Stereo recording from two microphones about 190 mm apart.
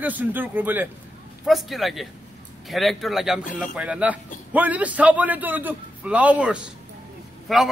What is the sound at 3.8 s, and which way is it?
A man's voice, 5° right (ahead or behind).